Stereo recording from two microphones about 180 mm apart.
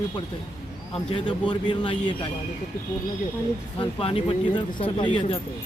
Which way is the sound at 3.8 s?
30° left (ahead or behind).